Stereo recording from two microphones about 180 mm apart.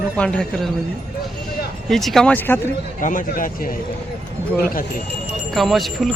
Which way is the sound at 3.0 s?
45° left (ahead or behind).